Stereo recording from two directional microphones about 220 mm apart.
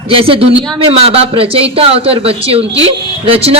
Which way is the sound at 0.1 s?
25° right (ahead or behind).